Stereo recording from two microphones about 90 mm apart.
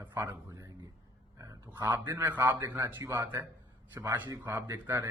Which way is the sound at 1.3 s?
35° right (ahead or behind).